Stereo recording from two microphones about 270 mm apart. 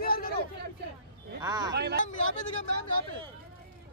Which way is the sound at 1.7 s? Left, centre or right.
Right.